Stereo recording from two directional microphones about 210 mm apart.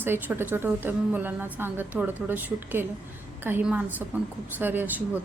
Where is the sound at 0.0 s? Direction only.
10° right (ahead or behind).